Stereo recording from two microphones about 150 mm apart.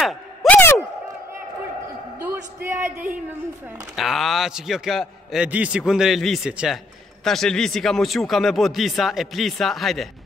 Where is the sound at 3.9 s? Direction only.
Centre (ahead or behind).